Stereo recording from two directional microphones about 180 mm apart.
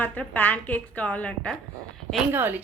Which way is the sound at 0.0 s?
10° left (ahead or behind).